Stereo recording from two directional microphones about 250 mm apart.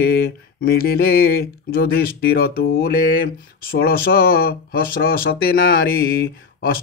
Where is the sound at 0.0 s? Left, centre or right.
Left.